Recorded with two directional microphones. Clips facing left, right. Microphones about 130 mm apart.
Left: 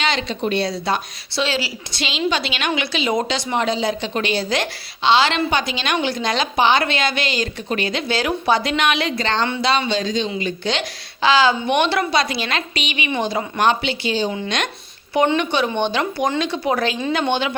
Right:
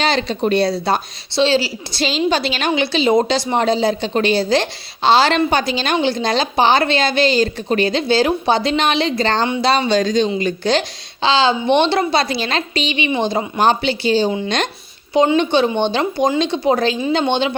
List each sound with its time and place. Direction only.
0.0 s a woman's voice: 35° right (ahead or behind)
11.2 s a woman's voice: 25° right (ahead or behind)